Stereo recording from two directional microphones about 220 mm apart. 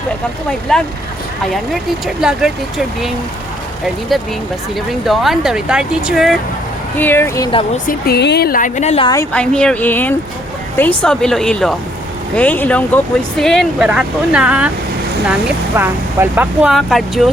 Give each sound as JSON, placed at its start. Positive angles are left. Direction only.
{"t": 0.7, "sound": "speech", "side_deg": 5}
{"t": 4.9, "sound": "speech", "side_deg": 0}
{"t": 7.9, "sound": "speech", "side_deg": 45}
{"t": 9.3, "sound": "speech", "side_deg": 5}